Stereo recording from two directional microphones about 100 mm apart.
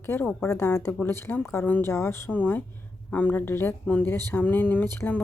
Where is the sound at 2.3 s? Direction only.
15° left (ahead or behind).